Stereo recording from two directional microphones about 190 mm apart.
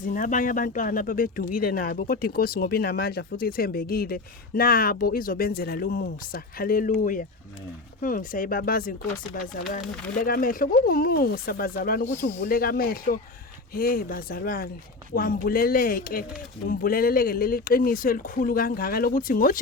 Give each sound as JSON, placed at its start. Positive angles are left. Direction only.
{"t": 0.0, "sound": "speech", "side_deg": 45}